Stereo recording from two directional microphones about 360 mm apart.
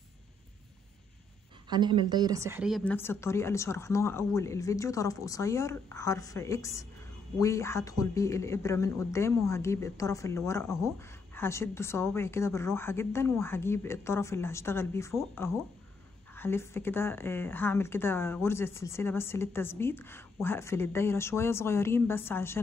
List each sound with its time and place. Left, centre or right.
1.7 s speech: centre